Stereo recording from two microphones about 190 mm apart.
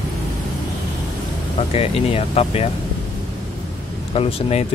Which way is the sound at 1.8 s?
30° left (ahead or behind).